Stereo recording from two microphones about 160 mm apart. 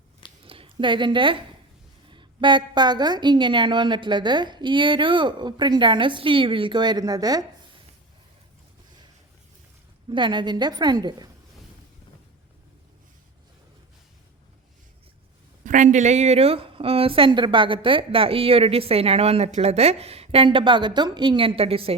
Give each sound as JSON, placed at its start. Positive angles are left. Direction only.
{"t": 0.4, "sound": "a sound", "side_deg": -35}
{"t": 2.0, "sound": "a woman's voice", "side_deg": -30}
{"t": 10.1, "sound": "a woman's voice", "side_deg": -30}
{"t": 15.6, "sound": "a woman's voice", "side_deg": -50}